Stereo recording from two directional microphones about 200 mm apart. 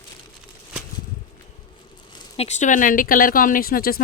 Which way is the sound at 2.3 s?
35° left (ahead or behind).